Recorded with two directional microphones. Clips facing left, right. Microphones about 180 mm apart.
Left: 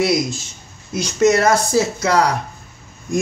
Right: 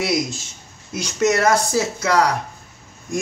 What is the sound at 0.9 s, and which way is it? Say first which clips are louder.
A man's voice: left 4 dB; 30° left (ahead or behind).